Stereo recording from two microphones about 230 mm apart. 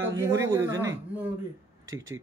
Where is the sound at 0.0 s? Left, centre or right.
Centre.